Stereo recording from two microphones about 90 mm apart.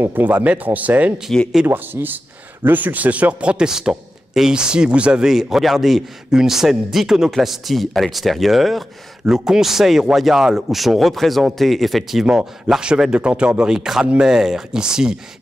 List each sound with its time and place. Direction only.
0.0 s a man's voice: 20° right (ahead or behind)